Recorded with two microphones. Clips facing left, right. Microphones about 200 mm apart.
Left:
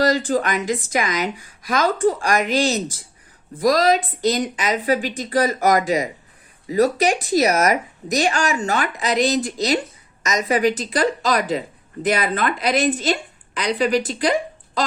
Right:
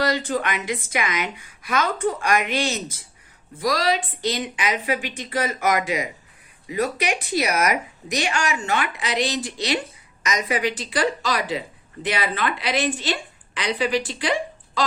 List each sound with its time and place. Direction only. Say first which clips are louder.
0.0 s a woman's voice: left 4 dB; 40° left (ahead or behind)